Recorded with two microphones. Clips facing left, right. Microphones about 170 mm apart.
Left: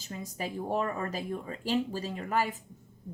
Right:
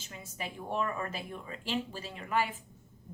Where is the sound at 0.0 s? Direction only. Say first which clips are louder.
Left 5 dB; 40° left (ahead or behind).